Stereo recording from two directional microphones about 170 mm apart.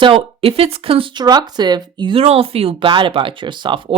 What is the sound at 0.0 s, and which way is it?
Speech, 35° right (ahead or behind).